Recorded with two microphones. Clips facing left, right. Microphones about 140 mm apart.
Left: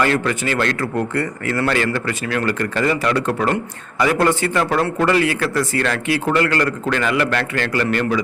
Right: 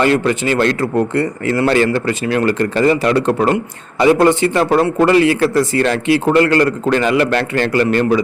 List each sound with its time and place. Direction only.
0.0 s speech: 25° right (ahead or behind)